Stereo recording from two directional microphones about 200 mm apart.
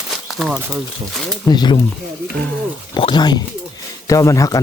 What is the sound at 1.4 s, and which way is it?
Speech, 20° left (ahead or behind).